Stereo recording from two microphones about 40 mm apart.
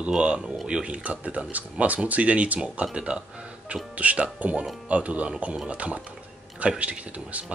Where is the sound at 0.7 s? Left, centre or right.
Right.